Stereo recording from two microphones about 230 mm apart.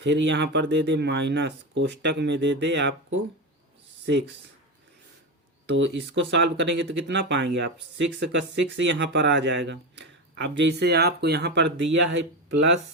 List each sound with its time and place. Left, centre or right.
0.0 s speech: right
5.6 s speech: right